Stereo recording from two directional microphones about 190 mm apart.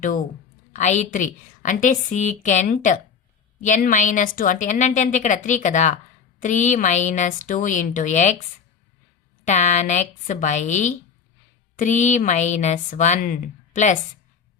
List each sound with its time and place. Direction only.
0.7 s a woman's voice: 40° left (ahead or behind)
9.4 s a woman's voice: 40° left (ahead or behind)